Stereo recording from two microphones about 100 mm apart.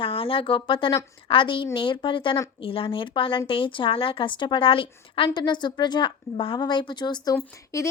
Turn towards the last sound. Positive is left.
turn(degrees=35)  # may be behind; listen again after turning